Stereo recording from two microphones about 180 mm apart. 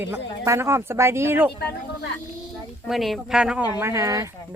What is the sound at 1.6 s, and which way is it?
Speech, 65° left (ahead or behind).